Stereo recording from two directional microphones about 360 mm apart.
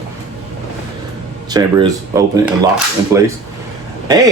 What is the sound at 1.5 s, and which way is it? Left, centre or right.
Speech, centre.